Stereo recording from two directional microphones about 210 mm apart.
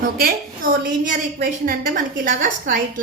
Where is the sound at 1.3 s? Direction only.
45° right (ahead or behind).